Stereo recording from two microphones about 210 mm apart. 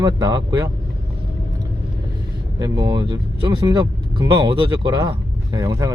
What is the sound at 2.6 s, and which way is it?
Speech, 20° right (ahead or behind).